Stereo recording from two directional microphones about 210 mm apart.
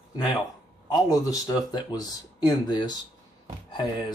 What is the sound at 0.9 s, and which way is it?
Speech, 15° left (ahead or behind).